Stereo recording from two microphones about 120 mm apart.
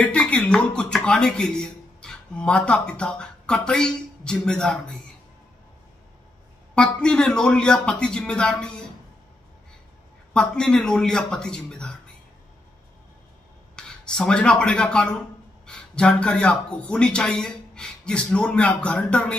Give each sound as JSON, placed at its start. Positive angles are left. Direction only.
{"t": 0.0, "sound": "speech", "side_deg": 10}
{"t": 6.7, "sound": "a man's voice", "side_deg": 5}
{"t": 10.3, "sound": "speech", "side_deg": 5}
{"t": 13.7, "sound": "speech", "side_deg": 5}